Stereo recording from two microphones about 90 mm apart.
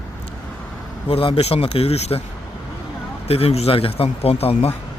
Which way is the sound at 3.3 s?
90° left.